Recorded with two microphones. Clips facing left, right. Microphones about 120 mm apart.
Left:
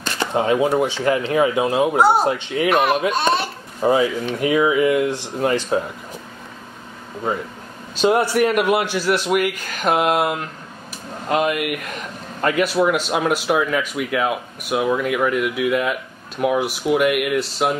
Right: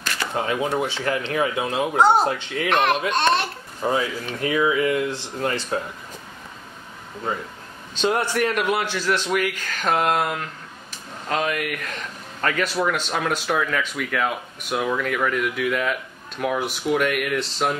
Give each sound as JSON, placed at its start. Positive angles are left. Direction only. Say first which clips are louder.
{"t": 0.0, "sound": "a sound", "louder": "left 5 dB", "side_deg": 25}
{"t": 0.7, "sound": "speech", "louder": "left 5 dB", "side_deg": 20}
{"t": 2.7, "sound": "speech", "louder": "left 2 dB", "side_deg": 5}
{"t": 7.9, "sound": "speech", "louder": "left 5 dB", "side_deg": 10}